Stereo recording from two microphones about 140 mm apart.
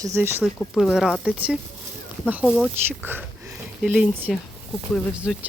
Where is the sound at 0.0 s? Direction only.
20° right (ahead or behind).